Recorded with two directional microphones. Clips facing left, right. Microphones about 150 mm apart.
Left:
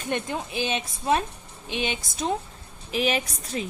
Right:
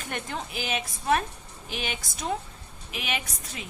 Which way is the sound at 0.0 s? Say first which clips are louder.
Left 5 dB; 20° left (ahead or behind).